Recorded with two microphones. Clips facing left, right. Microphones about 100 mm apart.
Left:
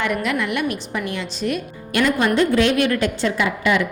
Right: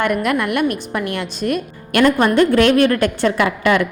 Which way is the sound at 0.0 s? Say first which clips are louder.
Right 4 dB; 50° right (ahead or behind).